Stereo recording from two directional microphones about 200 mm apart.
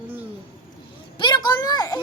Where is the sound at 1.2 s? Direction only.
20° left (ahead or behind).